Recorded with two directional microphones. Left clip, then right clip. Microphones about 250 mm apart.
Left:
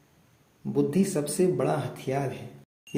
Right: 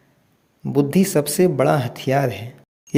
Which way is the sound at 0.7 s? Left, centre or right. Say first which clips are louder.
Right 7 dB; right.